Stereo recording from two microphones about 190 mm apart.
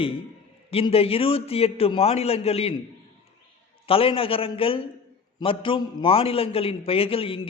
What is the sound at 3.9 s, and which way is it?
A man's voice, 30° left (ahead or behind).